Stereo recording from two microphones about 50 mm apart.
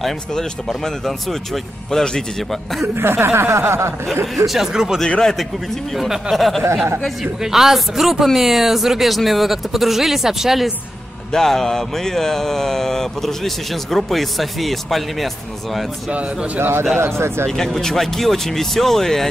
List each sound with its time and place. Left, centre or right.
0.3 s speech: centre
3.0 s speech: right
4.5 s speech: centre
5.0 s speech: centre
6.3 s speech: centre
7.4 s speech: centre
11.3 s speech: centre
16.5 s a man's voice: right
17.7 s speech: centre